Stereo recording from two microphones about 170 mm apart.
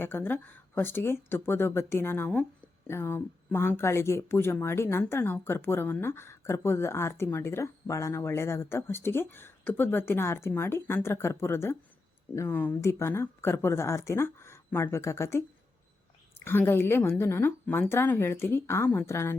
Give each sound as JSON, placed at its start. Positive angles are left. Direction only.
{"t": 0.0, "sound": "speech", "side_deg": 15}